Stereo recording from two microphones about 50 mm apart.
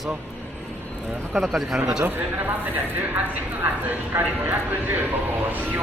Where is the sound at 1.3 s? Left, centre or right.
Centre.